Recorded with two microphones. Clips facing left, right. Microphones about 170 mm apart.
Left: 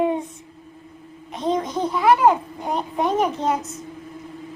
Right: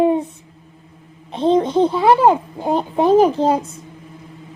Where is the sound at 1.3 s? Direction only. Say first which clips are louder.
Right 8 dB; 30° right (ahead or behind).